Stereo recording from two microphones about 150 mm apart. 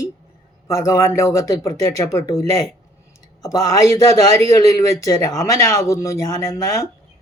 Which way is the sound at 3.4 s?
20° left (ahead or behind).